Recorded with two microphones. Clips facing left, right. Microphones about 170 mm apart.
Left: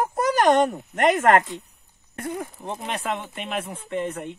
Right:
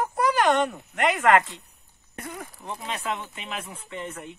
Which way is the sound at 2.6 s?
20° left (ahead or behind).